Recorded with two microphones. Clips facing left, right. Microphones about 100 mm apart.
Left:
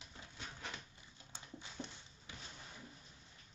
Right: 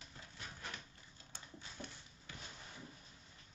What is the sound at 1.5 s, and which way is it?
Dog, 20° left (ahead or behind).